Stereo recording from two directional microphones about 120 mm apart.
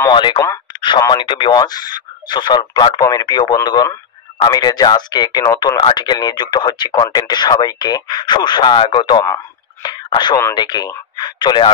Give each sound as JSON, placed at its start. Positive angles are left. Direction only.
{"t": 0.1, "sound": "speech", "side_deg": 40}
{"t": 0.7, "sound": "a sound", "side_deg": 40}
{"t": 1.1, "sound": "speech", "side_deg": 40}